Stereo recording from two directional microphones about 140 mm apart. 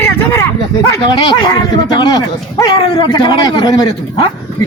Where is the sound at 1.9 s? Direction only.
30° left (ahead or behind).